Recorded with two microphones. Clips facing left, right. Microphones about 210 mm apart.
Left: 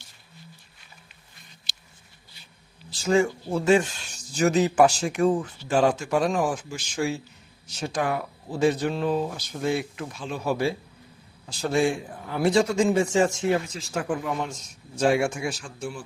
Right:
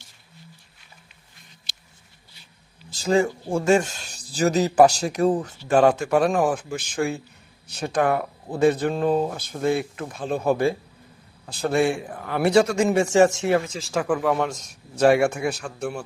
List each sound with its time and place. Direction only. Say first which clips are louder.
2.9 s speech: right 1 dB; 35° right (ahead or behind)
5.6 s a man's voice: right 5 dB; 55° right (ahead or behind)